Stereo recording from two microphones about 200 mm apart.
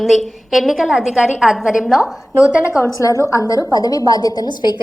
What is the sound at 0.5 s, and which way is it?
A woman's voice, centre (ahead or behind).